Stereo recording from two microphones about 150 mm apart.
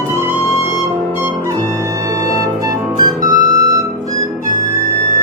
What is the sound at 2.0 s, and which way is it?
Music, 20° right (ahead or behind).